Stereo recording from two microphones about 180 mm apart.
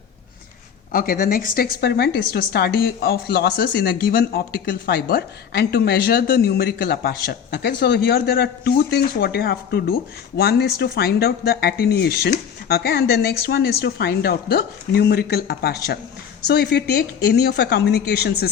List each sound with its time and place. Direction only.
0.9 s a woman's voice: 50° left (ahead or behind)